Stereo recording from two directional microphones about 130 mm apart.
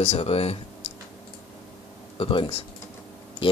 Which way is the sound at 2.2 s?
45° left (ahead or behind).